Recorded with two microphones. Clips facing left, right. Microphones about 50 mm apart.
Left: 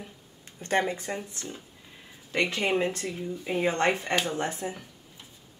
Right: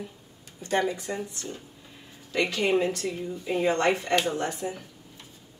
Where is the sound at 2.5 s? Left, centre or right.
Left.